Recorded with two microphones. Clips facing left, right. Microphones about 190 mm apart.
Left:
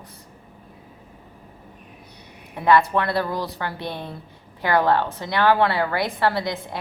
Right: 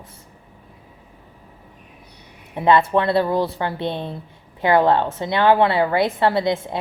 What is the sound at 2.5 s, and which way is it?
A woman's voice, 25° right (ahead or behind).